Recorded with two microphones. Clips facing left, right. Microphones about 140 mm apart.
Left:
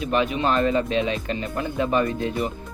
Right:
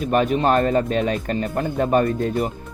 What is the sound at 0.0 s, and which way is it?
Speech, 45° right (ahead or behind).